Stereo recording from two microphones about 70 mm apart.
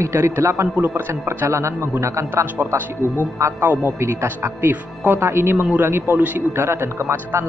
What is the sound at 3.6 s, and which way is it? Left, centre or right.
Speech, right.